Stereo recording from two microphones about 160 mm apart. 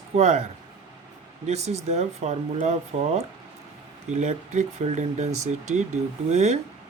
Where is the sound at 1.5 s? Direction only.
45° right (ahead or behind).